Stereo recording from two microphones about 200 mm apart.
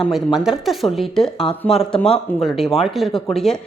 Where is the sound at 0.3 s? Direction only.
Centre (ahead or behind).